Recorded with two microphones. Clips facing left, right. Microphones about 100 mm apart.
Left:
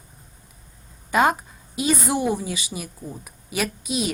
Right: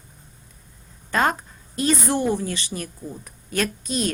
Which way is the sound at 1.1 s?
10° left (ahead or behind).